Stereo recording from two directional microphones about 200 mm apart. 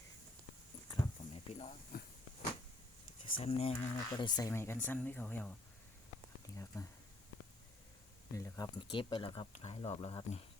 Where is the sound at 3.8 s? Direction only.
20° left (ahead or behind).